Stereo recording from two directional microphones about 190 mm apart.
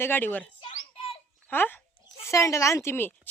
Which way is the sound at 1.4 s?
10° left (ahead or behind).